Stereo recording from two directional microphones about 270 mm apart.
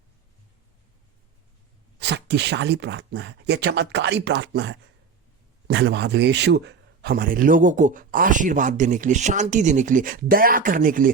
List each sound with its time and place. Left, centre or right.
2.0 s speech: right